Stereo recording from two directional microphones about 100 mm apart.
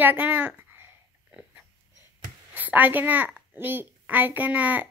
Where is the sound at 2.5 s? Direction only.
15° right (ahead or behind).